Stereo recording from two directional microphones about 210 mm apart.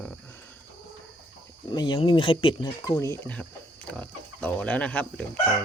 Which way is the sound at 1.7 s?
20° left (ahead or behind).